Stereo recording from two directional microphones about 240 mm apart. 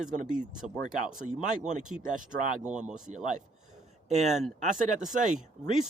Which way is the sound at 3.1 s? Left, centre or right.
Right.